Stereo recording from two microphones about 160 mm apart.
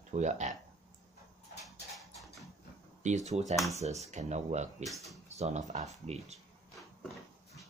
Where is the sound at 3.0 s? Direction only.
45° right (ahead or behind).